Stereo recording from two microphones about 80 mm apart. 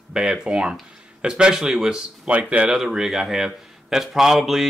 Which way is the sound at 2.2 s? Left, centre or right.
Centre.